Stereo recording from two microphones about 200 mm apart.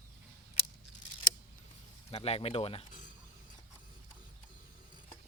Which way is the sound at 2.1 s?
30° left (ahead or behind).